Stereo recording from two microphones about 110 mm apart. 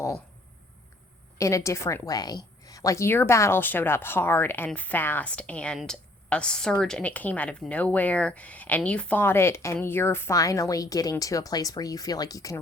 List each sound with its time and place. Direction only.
1.4 s a woman's voice: 30° left (ahead or behind)